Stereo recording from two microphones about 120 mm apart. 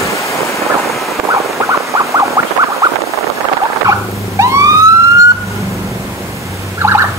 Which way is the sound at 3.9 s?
25° right (ahead or behind).